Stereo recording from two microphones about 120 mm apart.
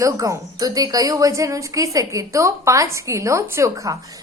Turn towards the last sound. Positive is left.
turn(degrees=-25)  # may be behind; listen again after turning